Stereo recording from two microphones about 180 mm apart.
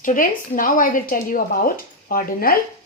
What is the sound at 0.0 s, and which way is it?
Speech, 50° left (ahead or behind).